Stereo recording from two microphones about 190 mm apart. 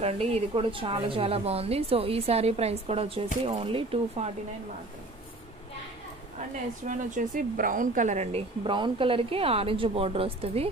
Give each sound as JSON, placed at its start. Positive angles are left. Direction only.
{"t": 0.0, "sound": "speech", "side_deg": -30}
{"t": 6.9, "sound": "speech", "side_deg": -40}